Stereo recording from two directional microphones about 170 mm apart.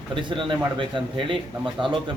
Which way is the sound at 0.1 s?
30° right (ahead or behind).